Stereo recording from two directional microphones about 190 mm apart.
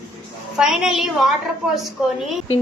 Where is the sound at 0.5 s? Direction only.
Centre (ahead or behind).